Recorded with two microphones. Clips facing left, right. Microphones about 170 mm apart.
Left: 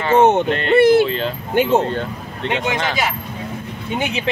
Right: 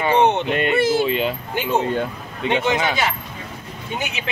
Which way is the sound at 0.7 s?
60° left (ahead or behind).